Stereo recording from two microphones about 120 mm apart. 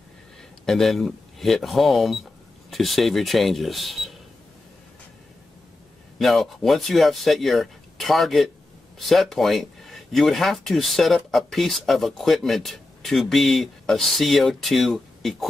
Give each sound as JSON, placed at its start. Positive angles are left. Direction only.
{"t": 0.7, "sound": "speech", "side_deg": 0}
{"t": 6.1, "sound": "speech", "side_deg": 0}